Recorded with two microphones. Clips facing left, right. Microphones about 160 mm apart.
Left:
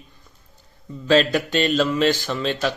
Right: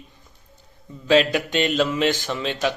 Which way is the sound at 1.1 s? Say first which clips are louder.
Even; 15° right (ahead or behind).